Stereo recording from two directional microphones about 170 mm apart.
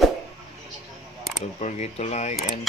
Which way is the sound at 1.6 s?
40° left (ahead or behind).